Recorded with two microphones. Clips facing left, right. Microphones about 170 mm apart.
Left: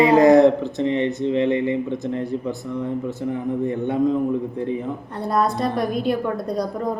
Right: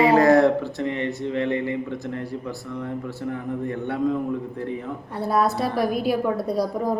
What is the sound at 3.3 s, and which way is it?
Speech, 20° left (ahead or behind).